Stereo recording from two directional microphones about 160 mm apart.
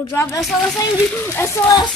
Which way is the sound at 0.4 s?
Centre (ahead or behind).